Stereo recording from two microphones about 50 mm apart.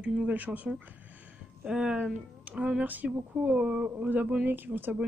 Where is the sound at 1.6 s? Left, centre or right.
Centre.